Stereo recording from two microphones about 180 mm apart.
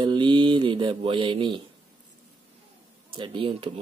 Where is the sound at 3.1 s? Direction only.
30° right (ahead or behind).